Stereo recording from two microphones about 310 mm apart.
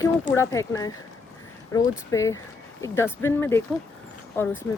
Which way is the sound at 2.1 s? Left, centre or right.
Centre.